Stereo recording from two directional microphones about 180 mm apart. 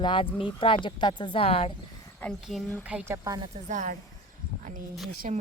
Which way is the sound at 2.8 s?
5° right (ahead or behind).